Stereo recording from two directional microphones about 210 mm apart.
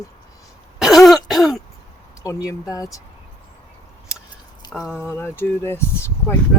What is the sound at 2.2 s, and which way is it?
Speech, 15° left (ahead or behind).